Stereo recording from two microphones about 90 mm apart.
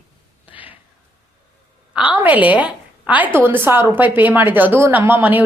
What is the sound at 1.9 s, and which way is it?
A woman's voice, 15° right (ahead or behind).